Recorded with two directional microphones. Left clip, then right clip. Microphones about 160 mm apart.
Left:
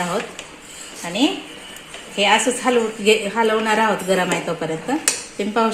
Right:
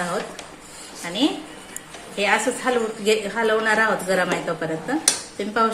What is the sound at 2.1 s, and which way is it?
A woman's voice, 40° left (ahead or behind).